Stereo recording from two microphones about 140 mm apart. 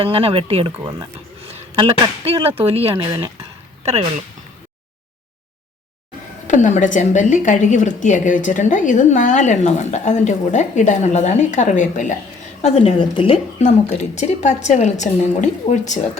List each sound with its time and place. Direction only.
0.0 s speech: 40° right (ahead or behind)
3.1 s speech: 20° right (ahead or behind)
3.8 s speech: 50° right (ahead or behind)
6.5 s a woman's voice: 65° left (ahead or behind)
12.6 s a woman's voice: 45° left (ahead or behind)
13.6 s a woman's voice: 55° left (ahead or behind)